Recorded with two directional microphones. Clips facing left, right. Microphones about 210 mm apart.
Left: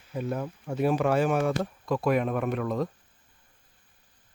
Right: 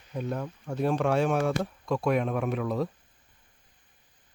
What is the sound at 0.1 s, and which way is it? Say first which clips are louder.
Speech: left 1 dB; 5° left (ahead or behind).